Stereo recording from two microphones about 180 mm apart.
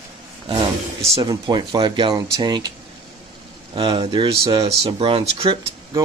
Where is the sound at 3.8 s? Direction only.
30° right (ahead or behind).